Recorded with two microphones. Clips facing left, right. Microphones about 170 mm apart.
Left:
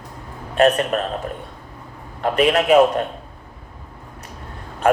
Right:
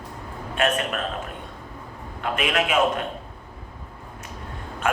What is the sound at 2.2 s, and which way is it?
Speech, 40° left (ahead or behind).